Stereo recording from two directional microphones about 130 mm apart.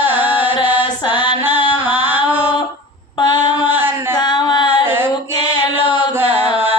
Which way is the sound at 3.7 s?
15° right (ahead or behind).